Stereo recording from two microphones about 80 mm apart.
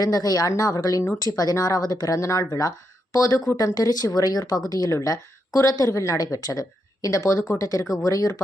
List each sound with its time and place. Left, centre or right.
0.0 s speech: left